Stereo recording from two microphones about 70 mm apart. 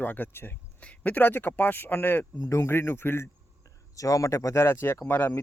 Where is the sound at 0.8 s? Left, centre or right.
Left.